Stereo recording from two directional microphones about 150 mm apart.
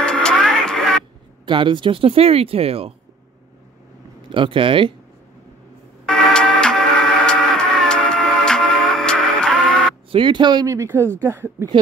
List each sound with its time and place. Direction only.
0.0 s music: 5° left (ahead or behind)
1.4 s speech: 35° right (ahead or behind)
4.3 s speech: 35° right (ahead or behind)
6.0 s music: 5° left (ahead or behind)
10.1 s speech: 30° right (ahead or behind)